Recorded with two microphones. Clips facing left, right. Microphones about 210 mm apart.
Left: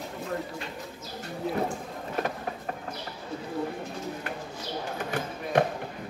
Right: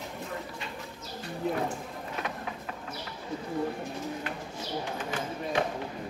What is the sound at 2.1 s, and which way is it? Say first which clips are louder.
Vehicle: left 6 dB; 45° left (ahead or behind).